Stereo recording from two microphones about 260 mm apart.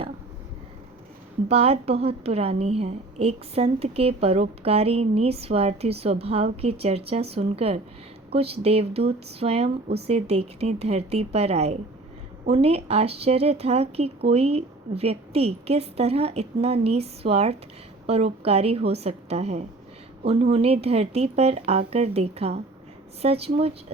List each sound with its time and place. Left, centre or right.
1.5 s a woman's voice: right